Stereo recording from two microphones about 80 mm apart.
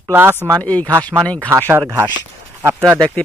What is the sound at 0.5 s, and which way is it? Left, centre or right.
Speech, centre.